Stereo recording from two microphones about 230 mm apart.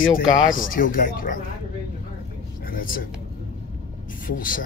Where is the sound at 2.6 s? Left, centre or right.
Left.